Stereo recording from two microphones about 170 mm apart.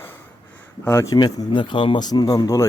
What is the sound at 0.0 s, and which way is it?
A man's voice, 15° left (ahead or behind).